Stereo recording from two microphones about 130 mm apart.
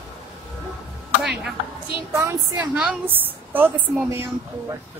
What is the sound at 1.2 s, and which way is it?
Speech, 5° right (ahead or behind).